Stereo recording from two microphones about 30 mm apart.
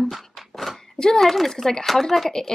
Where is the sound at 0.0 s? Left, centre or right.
Centre.